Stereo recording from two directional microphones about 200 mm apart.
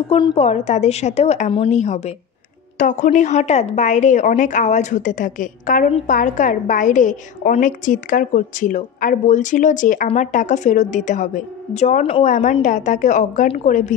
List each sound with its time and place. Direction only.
0.1 s a woman's voice: 30° left (ahead or behind)